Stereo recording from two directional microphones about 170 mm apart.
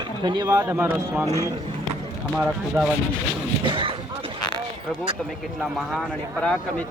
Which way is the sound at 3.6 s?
30° right (ahead or behind).